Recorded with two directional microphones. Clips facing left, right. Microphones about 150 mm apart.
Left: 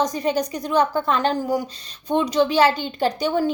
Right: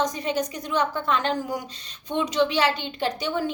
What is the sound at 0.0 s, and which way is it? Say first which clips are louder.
A woman's voice: left 4 dB; 40° left (ahead or behind).